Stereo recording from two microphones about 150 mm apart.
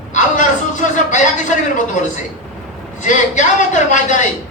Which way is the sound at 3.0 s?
55° left (ahead or behind).